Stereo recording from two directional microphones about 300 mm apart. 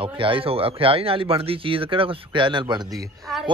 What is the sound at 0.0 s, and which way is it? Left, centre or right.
Speech, centre.